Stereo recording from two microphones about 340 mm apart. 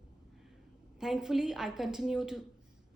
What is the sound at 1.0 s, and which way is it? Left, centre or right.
A woman's voice, centre.